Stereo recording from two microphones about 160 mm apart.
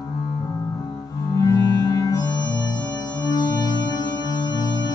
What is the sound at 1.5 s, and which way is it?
Music, 25° left (ahead or behind).